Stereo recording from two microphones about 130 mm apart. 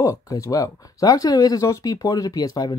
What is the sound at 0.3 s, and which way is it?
Speech, 25° left (ahead or behind).